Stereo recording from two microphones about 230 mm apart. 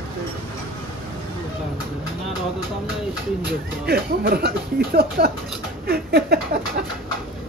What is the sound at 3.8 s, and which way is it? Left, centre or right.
Speech, right.